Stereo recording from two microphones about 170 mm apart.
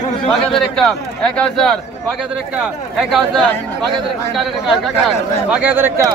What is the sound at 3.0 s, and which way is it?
A man's voice, centre (ahead or behind).